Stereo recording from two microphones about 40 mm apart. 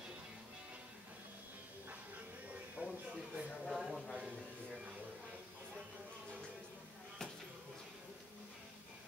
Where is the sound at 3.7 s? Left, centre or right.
Centre.